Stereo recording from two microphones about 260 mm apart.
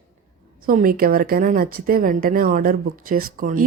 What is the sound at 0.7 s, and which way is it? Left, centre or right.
Speech, right.